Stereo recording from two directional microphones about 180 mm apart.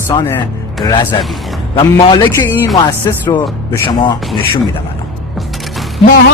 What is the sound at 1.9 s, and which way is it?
Speech, 20° left (ahead or behind).